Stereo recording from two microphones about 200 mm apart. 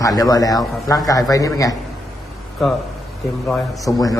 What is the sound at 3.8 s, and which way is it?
Speech, 15° left (ahead or behind).